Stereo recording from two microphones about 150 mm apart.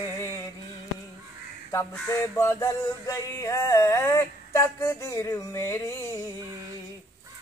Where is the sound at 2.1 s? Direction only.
15° left (ahead or behind).